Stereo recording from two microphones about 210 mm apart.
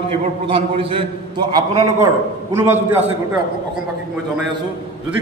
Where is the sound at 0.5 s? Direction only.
25° right (ahead or behind); by 3.0 s 10° right (ahead or behind).